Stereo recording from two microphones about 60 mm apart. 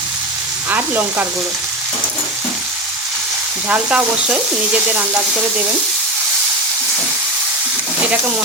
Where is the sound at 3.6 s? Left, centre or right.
Right.